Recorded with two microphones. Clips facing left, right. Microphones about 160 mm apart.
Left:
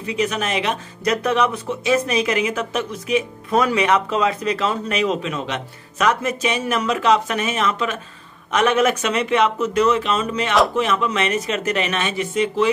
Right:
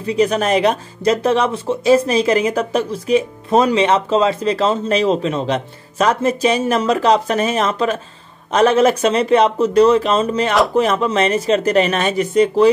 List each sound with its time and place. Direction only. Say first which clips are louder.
0.0 s speech: right 6 dB; 35° right (ahead or behind)
1.1 s speech: right 2 dB; 30° right (ahead or behind)